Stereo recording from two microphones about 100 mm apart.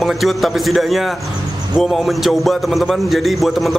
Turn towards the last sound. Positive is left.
turn(degrees=0)  # may be behind; listen again after turning